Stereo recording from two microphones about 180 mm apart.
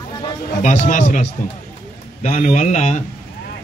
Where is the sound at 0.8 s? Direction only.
45° left (ahead or behind).